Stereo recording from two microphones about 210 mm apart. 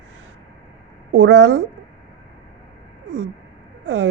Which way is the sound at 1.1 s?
60° right (ahead or behind).